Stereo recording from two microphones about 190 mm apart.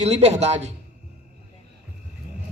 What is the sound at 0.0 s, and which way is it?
Speech, 35° right (ahead or behind).